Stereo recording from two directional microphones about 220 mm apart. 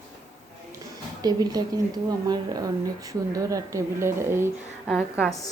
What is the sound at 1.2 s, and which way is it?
A woman's voice, 15° right (ahead or behind).